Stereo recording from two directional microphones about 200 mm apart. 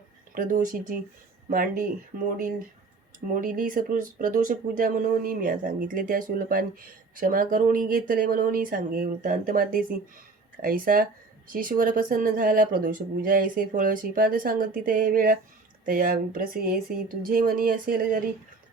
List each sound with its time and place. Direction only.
0.3 s speech: 45° right (ahead or behind)
3.3 s speech: 45° right (ahead or behind)